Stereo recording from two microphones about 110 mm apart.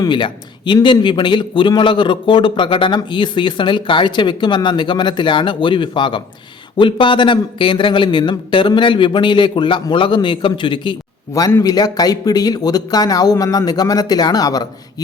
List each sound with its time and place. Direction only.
0.0 s a man's voice: 45° left (ahead or behind)
11.6 s speech: 35° left (ahead or behind)